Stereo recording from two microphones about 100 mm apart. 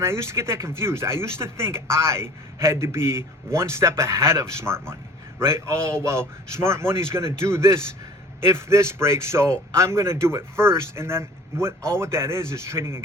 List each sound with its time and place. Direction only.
0.0 s speech: 25° right (ahead or behind)